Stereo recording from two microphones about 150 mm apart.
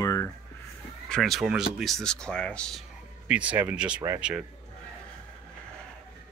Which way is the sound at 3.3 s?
10° right (ahead or behind).